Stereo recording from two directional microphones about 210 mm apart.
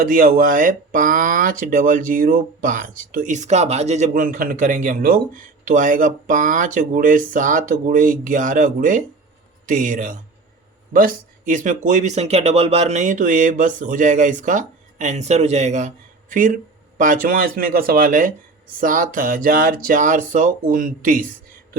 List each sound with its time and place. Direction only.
0.0 s speech: 45° right (ahead or behind)